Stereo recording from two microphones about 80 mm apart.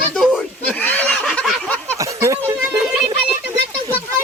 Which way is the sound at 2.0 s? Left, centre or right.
Right.